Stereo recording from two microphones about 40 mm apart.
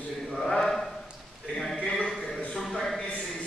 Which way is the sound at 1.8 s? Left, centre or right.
Left.